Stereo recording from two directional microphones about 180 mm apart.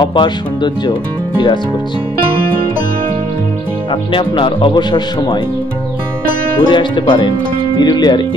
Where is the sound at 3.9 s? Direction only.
25° left (ahead or behind).